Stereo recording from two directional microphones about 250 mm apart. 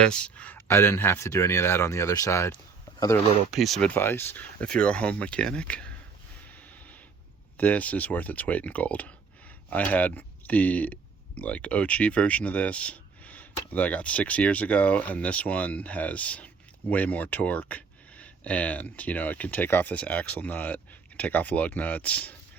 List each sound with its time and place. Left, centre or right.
0.0 s speech: centre
3.5 s speech: centre
6.5 s snort: centre
7.5 s speech: centre